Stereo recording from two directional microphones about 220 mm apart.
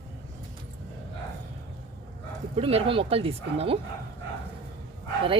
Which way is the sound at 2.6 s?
25° right (ahead or behind).